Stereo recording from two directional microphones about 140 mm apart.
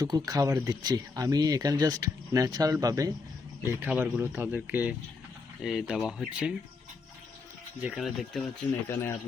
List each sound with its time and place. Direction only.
0.0 s speech: 25° right (ahead or behind); by 4.9 s 10° right (ahead or behind)
5.6 s speech: centre (ahead or behind)
7.8 s speech: 5° right (ahead or behind)
8.9 s speech: 20° left (ahead or behind)